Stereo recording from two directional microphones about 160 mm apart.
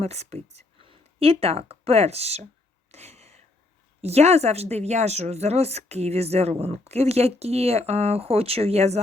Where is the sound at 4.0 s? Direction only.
40° right (ahead or behind).